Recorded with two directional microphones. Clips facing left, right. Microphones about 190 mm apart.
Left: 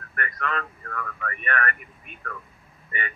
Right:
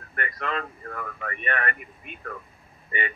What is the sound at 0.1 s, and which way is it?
Speech, 25° right (ahead or behind).